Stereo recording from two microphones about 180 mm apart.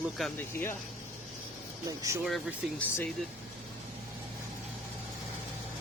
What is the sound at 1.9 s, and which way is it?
Speech, 20° right (ahead or behind).